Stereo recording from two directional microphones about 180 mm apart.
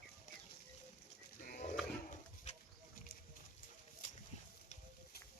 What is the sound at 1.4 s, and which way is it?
Pig, 50° left (ahead or behind).